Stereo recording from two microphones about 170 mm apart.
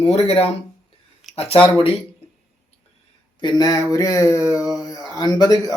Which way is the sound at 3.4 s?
25° left (ahead or behind).